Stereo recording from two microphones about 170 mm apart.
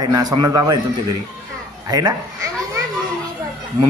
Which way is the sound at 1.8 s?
20° right (ahead or behind).